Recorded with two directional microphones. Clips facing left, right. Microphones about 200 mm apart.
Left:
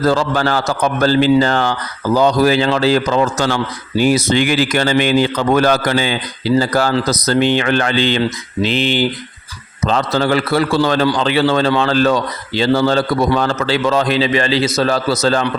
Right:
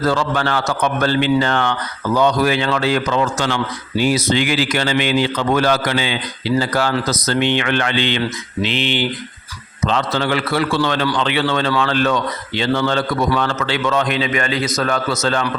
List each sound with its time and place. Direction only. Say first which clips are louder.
0.0 s a man's voice: left 3 dB; 35° left (ahead or behind)